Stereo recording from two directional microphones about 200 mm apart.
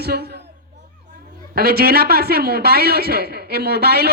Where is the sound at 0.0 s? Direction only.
55° right (ahead or behind).